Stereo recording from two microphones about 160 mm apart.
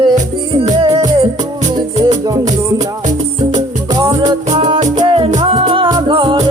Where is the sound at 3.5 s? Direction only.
25° right (ahead or behind).